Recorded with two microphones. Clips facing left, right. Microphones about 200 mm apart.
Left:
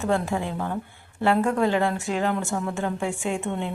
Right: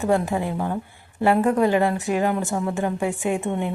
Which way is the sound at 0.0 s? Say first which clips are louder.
Right 3 dB; 15° right (ahead or behind).